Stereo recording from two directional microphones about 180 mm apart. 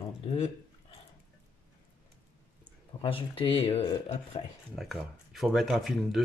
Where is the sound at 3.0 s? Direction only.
30° left (ahead or behind).